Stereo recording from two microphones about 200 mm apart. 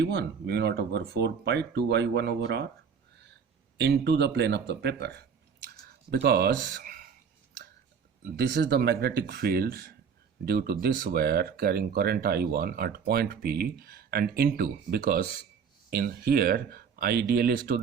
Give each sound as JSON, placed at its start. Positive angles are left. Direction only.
{"t": 0.0, "sound": "speech", "side_deg": -60}
{"t": 3.8, "sound": "speech", "side_deg": -60}
{"t": 8.2, "sound": "speech", "side_deg": -55}